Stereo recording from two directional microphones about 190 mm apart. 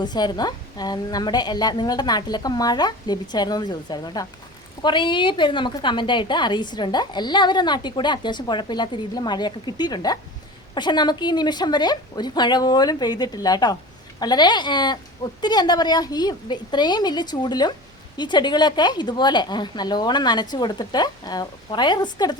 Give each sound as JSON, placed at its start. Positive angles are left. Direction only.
{"t": 0.0, "sound": "a woman's voice", "side_deg": 20}